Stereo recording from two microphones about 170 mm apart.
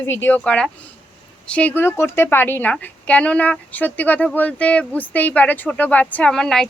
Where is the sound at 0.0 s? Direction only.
15° left (ahead or behind).